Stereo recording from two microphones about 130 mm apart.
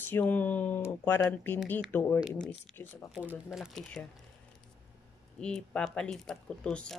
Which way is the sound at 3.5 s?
5° left (ahead or behind).